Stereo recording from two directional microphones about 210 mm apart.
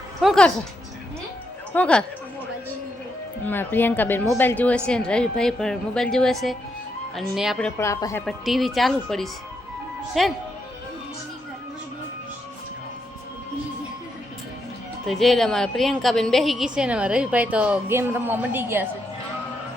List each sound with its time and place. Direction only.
0.2 s a woman's voice: centre (ahead or behind)
1.7 s a woman's voice: 5° left (ahead or behind)
3.4 s a woman's voice: 10° left (ahead or behind)
7.8 s a woman's voice: 10° left (ahead or behind)
8.2 s a woman's voice: centre (ahead or behind)
15.0 s a woman's voice: centre (ahead or behind)